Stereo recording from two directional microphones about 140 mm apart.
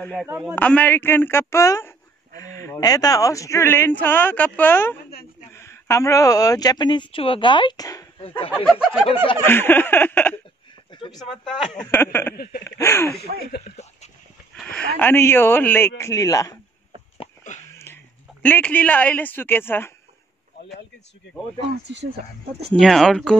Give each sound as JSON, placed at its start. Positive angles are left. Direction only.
{"t": 0.6, "sound": "a man's voice", "side_deg": 10}
{"t": 9.0, "sound": "speech", "side_deg": 40}
{"t": 9.4, "sound": "a man's voice", "side_deg": 15}
{"t": 10.9, "sound": "a sound", "side_deg": 35}
{"t": 11.1, "sound": "a man's voice", "side_deg": 0}
{"t": 15.0, "sound": "a man's voice", "side_deg": 15}
{"t": 18.4, "sound": "a man's voice", "side_deg": 10}
{"t": 22.0, "sound": "speech", "side_deg": -45}
{"t": 22.8, "sound": "speech", "side_deg": 5}